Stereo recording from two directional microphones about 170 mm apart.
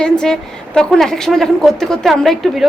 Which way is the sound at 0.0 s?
5° left (ahead or behind).